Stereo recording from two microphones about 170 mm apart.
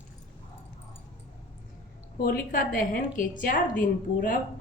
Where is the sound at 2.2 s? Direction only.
55° left (ahead or behind).